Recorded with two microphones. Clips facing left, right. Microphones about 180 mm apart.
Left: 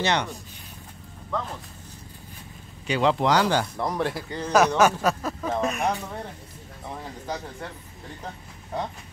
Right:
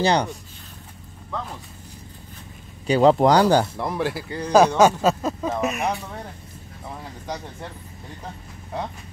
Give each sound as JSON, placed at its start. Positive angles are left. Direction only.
{"t": 0.0, "sound": "speech", "side_deg": -35}
{"t": 2.9, "sound": "speech", "side_deg": -40}
{"t": 3.7, "sound": "speech", "side_deg": -5}
{"t": 4.5, "sound": "speech", "side_deg": -30}
{"t": 5.5, "sound": "speech", "side_deg": -5}